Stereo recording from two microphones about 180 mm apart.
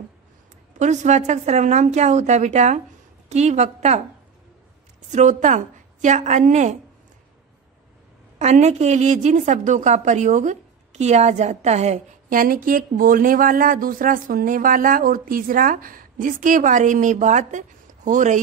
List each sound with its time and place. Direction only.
0.7 s a woman's voice: 40° right (ahead or behind)
5.1 s a woman's voice: 45° right (ahead or behind)
8.4 s a woman's voice: 40° right (ahead or behind)